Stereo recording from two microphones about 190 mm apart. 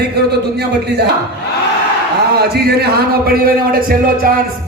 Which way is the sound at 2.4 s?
55° right (ahead or behind).